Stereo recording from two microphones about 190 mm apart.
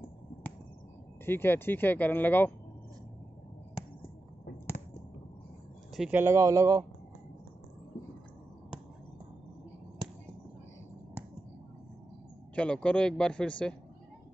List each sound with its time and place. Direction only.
1.2 s speech: 10° left (ahead or behind)
5.9 s speech: 10° right (ahead or behind)
12.5 s a man's voice: 5° left (ahead or behind)